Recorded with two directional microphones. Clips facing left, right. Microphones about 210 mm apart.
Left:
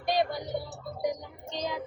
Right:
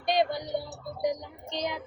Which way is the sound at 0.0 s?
20° right (ahead or behind).